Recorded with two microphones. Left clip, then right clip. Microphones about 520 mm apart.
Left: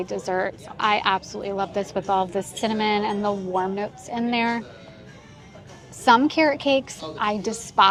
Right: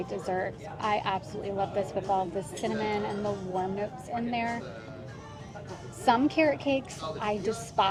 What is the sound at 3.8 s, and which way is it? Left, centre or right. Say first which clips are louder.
Speech: left 5 dB; left.